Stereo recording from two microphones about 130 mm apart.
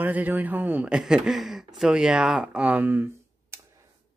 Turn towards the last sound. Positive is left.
turn(degrees=-15)  # may be behind; listen again after turning